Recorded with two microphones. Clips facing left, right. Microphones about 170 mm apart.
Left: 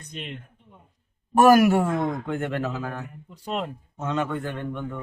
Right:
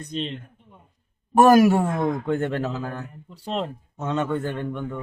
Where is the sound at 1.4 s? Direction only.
25° right (ahead or behind).